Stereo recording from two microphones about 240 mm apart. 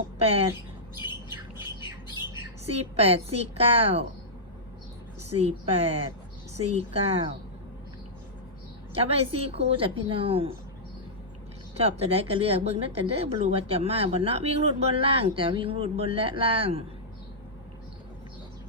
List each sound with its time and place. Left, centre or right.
0.2 s speech: right
2.0 s squawk: centre
2.9 s a woman's voice: right
5.4 s a woman's voice: right
9.0 s a woman's voice: right
11.8 s a woman's voice: right